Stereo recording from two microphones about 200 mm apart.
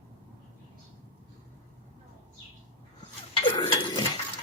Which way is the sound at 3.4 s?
25° left (ahead or behind).